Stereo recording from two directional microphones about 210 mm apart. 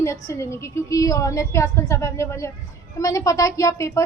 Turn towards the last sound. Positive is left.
turn(degrees=15)  # may be behind; listen again after turning